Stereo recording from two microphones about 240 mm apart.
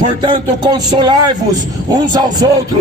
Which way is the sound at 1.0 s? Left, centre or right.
Centre.